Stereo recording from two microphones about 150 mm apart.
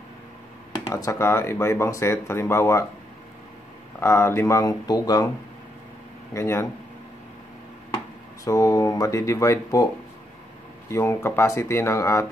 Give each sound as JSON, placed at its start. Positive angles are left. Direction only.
{"t": 0.9, "sound": "speech", "side_deg": 20}
{"t": 4.0, "sound": "speech", "side_deg": 20}
{"t": 6.3, "sound": "speech", "side_deg": 20}
{"t": 8.5, "sound": "speech", "side_deg": 20}
{"t": 10.9, "sound": "speech", "side_deg": 20}